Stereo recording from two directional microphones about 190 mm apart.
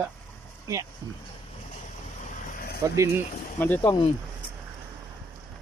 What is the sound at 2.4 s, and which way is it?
Vehicle, 45° left (ahead or behind).